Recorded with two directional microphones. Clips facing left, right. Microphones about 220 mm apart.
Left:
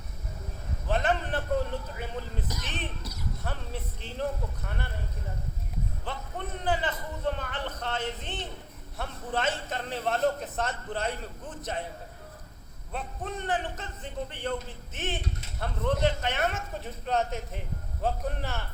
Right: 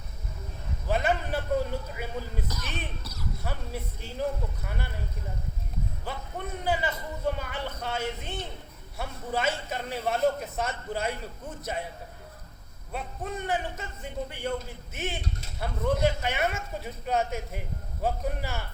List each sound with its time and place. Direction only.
0.9 s a sound: 10° right (ahead or behind)
2.5 s music: 20° left (ahead or behind)
3.4 s a man's voice: 10° right (ahead or behind)
6.1 s a man's voice: 10° right (ahead or behind)
12.9 s a man's voice: 10° right (ahead or behind)